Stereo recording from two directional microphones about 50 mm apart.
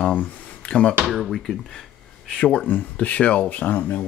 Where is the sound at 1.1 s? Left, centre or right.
Centre.